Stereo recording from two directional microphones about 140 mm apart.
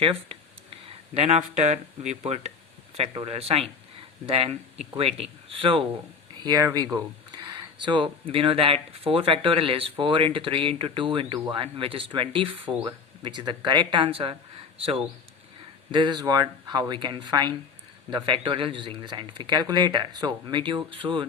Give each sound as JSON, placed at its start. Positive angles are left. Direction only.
{"t": 0.0, "sound": "speech", "side_deg": -40}
{"t": 6.4, "sound": "a man's voice", "side_deg": -25}